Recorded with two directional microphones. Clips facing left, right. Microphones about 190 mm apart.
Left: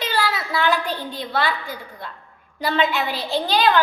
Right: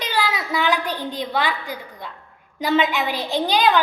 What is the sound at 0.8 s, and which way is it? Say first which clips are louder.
A child's voice: right 2 dB; 15° right (ahead or behind).